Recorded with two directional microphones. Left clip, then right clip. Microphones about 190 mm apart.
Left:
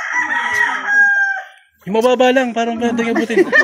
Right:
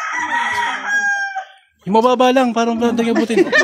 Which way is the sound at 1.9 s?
25° right (ahead or behind).